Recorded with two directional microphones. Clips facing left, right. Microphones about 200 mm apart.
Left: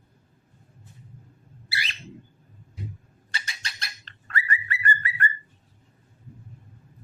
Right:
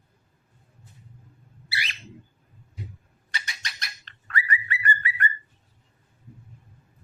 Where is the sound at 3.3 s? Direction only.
30° left (ahead or behind).